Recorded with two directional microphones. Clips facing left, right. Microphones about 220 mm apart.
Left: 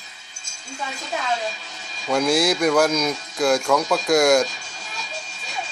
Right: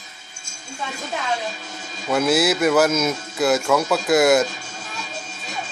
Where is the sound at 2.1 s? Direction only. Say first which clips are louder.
Right 1 dB; 5° right (ahead or behind).